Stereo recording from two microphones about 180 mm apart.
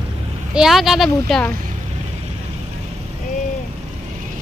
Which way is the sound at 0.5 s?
Centre (ahead or behind).